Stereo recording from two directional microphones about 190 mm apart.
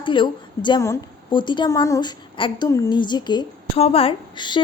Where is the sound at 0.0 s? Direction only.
25° left (ahead or behind).